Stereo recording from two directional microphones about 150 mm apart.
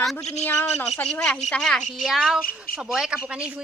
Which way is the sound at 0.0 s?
Centre (ahead or behind).